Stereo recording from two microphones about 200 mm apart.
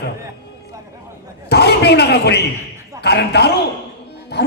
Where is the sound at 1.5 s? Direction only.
55° left (ahead or behind).